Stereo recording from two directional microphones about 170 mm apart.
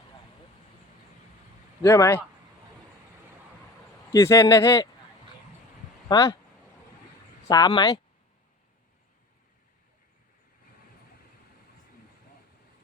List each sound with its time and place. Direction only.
1.8 s speech: 15° left (ahead or behind)
4.1 s speech: 15° left (ahead or behind)
6.1 s speech: 20° left (ahead or behind)
7.4 s speech: 25° left (ahead or behind)